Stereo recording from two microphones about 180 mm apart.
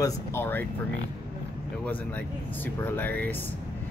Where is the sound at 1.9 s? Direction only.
10° left (ahead or behind).